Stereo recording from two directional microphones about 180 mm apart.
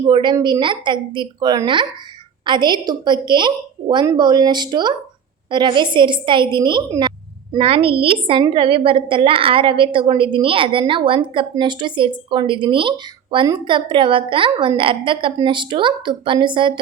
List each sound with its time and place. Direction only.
0.0 s a woman's voice: 25° right (ahead or behind)